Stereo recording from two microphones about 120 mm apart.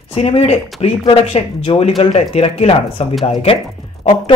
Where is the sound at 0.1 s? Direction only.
55° left (ahead or behind).